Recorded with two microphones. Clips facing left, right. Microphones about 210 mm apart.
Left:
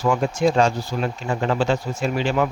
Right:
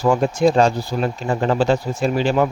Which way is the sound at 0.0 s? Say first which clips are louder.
Right 3 dB; 35° right (ahead or behind).